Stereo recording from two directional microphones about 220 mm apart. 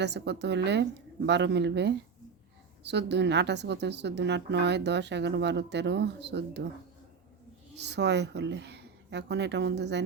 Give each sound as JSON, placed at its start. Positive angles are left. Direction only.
{"t": 0.0, "sound": "a woman's voice", "side_deg": -50}
{"t": 7.8, "sound": "a woman's voice", "side_deg": -50}